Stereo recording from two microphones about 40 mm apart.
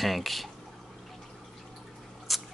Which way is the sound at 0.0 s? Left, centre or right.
Centre.